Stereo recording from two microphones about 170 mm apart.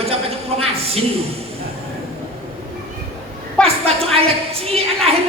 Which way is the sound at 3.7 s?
35° right (ahead or behind).